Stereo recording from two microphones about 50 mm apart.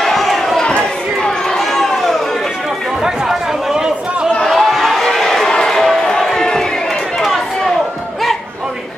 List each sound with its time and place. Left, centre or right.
0.0 s crowd: centre
0.7 s chatter: centre
3.0 s chatter: centre
4.5 s a sound: centre